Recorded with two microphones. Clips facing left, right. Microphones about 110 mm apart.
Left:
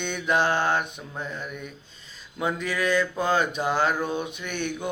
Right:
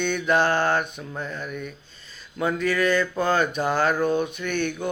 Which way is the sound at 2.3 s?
15° left (ahead or behind).